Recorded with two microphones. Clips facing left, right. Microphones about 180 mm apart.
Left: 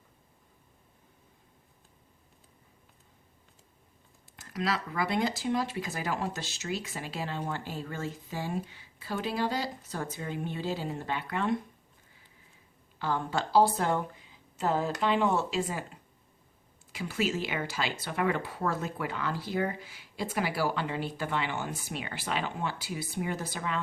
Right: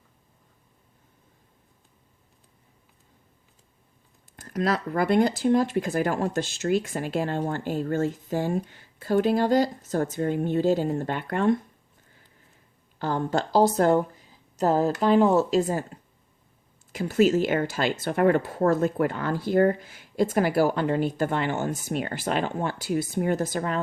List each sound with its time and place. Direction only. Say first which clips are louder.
4.4 s speech: right 6 dB; 50° right (ahead or behind)
13.0 s a woman's voice: right 5 dB; 45° right (ahead or behind)
16.9 s speech: right 10 dB; 45° right (ahead or behind)